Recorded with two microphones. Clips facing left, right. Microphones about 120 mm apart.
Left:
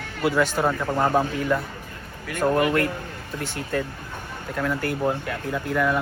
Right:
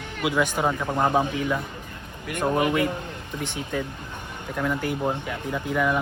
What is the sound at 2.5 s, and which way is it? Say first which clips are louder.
Speech: left 1 dB; 10° right (ahead or behind).